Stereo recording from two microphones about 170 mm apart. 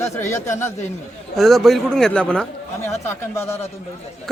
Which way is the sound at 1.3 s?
Centre (ahead or behind).